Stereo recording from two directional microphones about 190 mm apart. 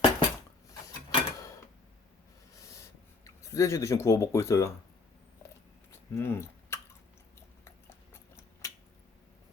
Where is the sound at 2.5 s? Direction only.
15° left (ahead or behind).